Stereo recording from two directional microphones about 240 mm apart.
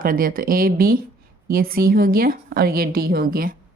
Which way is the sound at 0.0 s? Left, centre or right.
Right.